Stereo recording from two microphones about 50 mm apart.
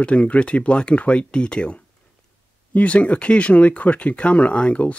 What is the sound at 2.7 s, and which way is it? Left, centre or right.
Speech, left.